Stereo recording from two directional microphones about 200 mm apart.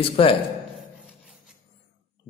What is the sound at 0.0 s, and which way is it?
Speech, 25° left (ahead or behind).